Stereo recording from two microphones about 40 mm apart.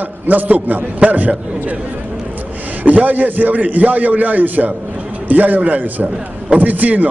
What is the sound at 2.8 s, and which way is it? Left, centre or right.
A man's voice, right.